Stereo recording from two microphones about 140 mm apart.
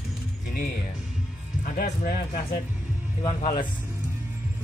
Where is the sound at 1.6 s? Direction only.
80° left.